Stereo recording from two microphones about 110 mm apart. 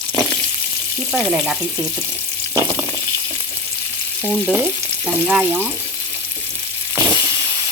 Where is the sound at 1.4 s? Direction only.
5° right (ahead or behind).